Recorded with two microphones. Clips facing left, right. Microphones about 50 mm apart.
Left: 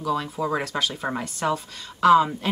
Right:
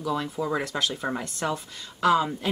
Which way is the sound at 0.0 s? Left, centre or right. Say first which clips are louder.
Left 2 dB; centre.